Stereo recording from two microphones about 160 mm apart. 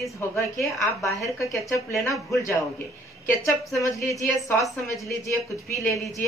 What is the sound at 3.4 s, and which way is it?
Speech, 20° left (ahead or behind).